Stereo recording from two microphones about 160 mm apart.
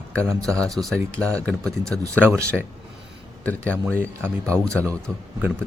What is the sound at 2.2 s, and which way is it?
Speech, 15° right (ahead or behind).